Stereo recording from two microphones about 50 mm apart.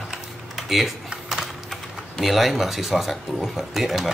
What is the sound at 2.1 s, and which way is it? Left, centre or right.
Speech, centre.